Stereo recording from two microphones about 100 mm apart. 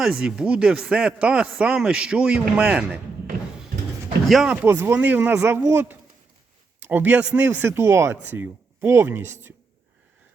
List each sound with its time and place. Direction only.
0.0 s speech: 10° right (ahead or behind)
4.4 s speech: 15° right (ahead or behind)